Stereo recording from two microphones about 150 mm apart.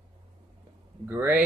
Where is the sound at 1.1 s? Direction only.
15° right (ahead or behind).